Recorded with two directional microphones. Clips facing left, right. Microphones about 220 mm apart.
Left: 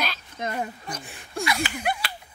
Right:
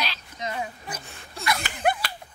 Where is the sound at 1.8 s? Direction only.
50° right (ahead or behind).